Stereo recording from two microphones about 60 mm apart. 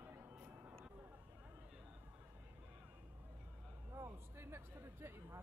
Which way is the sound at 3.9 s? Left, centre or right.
Right.